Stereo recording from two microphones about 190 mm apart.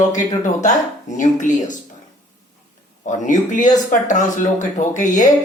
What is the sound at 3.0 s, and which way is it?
Speech, 40° left (ahead or behind).